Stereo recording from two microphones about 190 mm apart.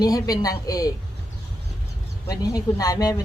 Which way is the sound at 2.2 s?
20° left (ahead or behind).